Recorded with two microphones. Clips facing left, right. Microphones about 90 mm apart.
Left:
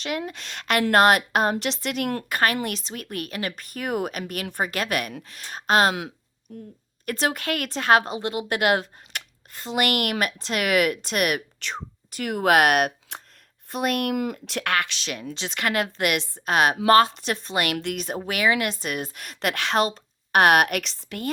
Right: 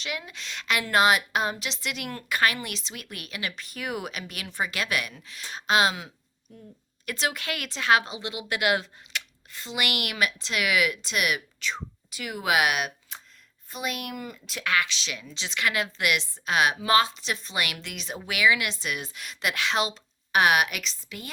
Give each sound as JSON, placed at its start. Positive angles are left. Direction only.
{"t": 0.0, "sound": "speech", "side_deg": 45}